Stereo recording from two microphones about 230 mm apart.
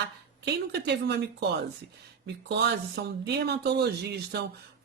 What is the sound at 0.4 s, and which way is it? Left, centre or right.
Speech, right.